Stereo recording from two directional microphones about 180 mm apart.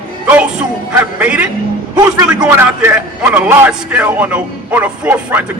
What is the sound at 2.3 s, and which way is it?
A man's voice, 10° right (ahead or behind).